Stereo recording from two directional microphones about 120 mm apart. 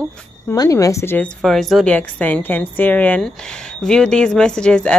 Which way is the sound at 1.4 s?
Centre (ahead or behind).